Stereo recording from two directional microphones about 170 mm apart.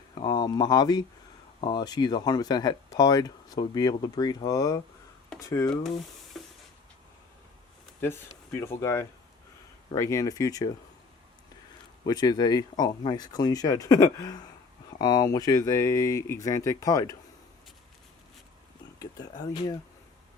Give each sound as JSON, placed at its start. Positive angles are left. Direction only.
{"t": 0.2, "sound": "speech", "side_deg": 25}
{"t": 6.3, "sound": "hiss", "side_deg": 0}
{"t": 8.0, "sound": "speech", "side_deg": 15}
{"t": 12.0, "sound": "speech", "side_deg": 25}
{"t": 18.9, "sound": "speech", "side_deg": 20}